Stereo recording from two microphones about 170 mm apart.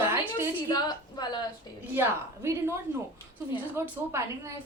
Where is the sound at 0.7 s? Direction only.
25° left (ahead or behind).